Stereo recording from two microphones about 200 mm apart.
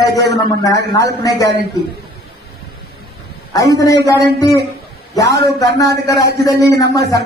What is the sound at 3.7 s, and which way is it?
Speech, 15° left (ahead or behind).